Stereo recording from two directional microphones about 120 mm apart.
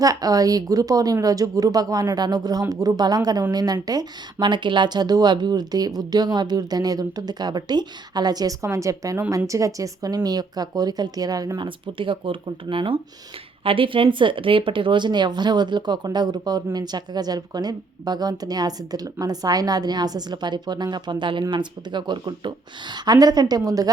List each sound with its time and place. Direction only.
0.0 s a woman's voice: 30° right (ahead or behind)